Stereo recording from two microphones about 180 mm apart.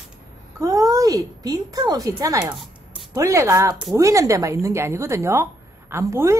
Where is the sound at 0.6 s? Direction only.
20° right (ahead or behind).